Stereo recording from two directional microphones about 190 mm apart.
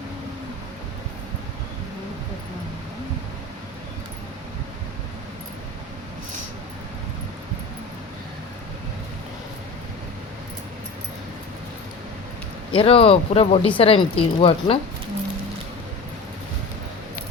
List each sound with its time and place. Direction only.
12.7 s speech: 30° left (ahead or behind)